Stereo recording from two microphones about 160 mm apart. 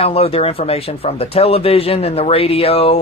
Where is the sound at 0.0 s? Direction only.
35° left (ahead or behind).